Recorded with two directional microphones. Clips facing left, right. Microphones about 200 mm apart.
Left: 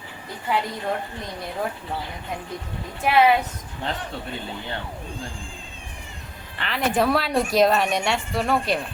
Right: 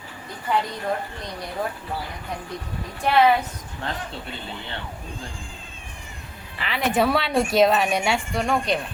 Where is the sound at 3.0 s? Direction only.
5° left (ahead or behind).